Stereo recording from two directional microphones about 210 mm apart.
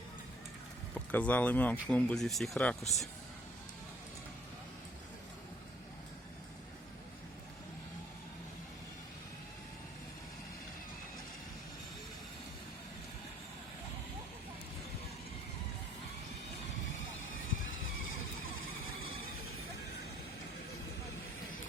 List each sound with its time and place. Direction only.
0.9 s speech: 10° left (ahead or behind)
17.2 s vehicle: 70° left (ahead or behind)